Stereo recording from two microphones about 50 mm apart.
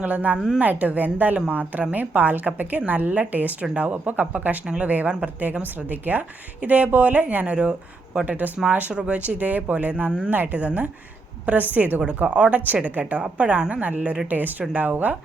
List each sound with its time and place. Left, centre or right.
0.0 s a woman's voice: right
4.6 s speech: centre
4.9 s a woman's voice: right
8.2 s a woman's voice: right
8.9 s a woman's voice: right